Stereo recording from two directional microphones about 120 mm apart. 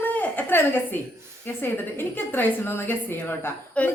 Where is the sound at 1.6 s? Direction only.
20° left (ahead or behind).